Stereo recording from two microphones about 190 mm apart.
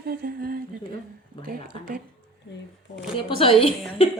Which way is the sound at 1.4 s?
50° right (ahead or behind).